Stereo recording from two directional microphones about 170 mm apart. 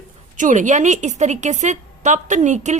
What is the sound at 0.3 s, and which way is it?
A woman's voice, 50° right (ahead or behind).